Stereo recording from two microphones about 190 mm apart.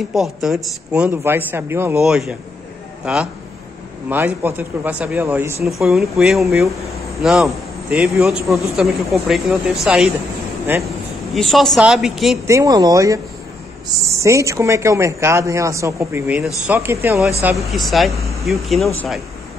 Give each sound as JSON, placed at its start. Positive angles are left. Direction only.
{"t": 0.1, "sound": "a man's voice", "side_deg": 0}
{"t": 5.6, "sound": "a man's voice", "side_deg": 0}
{"t": 11.3, "sound": "a man's voice", "side_deg": 0}
{"t": 12.4, "sound": "a man's voice", "side_deg": -15}